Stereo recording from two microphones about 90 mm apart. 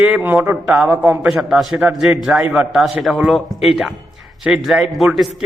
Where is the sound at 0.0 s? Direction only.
20° right (ahead or behind).